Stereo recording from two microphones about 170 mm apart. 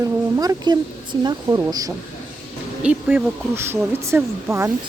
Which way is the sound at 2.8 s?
10° right (ahead or behind).